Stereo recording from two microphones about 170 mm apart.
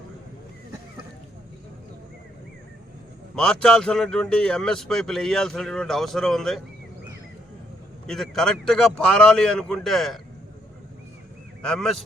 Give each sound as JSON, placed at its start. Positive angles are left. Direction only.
{"t": 3.3, "sound": "speech", "side_deg": 5}
{"t": 8.0, "sound": "speech", "side_deg": 0}
{"t": 11.6, "sound": "speech", "side_deg": 5}